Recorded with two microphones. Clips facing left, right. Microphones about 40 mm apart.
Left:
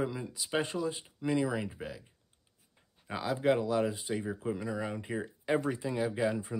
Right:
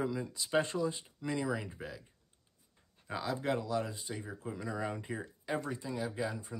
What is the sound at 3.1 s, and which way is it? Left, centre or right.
Speech, centre.